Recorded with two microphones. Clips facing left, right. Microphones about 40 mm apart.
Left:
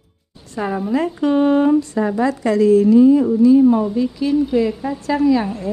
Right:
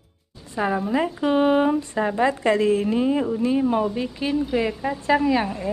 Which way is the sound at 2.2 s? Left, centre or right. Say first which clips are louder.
Left 3 dB; right.